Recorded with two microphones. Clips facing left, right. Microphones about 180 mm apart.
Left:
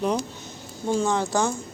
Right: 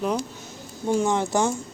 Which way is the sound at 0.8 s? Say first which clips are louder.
Right 1 dB; 15° right (ahead or behind).